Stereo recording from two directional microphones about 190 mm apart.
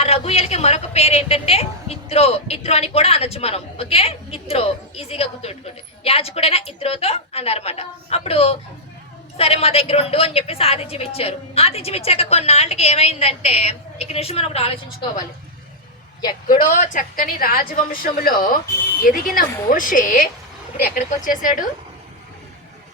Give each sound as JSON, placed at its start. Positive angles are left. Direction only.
{"t": 0.0, "sound": "a woman's voice", "side_deg": 30}
{"t": 16.6, "sound": "a woman's voice", "side_deg": 45}
{"t": 21.2, "sound": "a woman's voice", "side_deg": 45}